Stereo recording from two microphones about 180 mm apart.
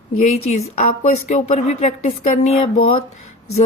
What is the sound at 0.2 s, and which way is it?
A woman's voice, 40° left (ahead or behind).